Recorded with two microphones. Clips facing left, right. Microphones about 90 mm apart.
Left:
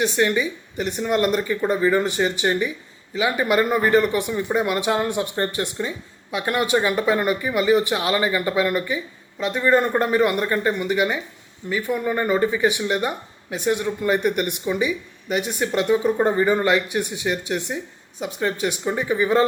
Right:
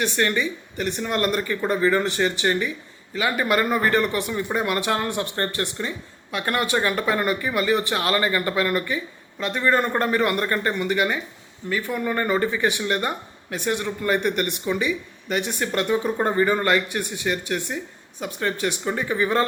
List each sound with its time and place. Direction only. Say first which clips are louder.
0.0 s speech: left 2 dB; 15° left (ahead or behind)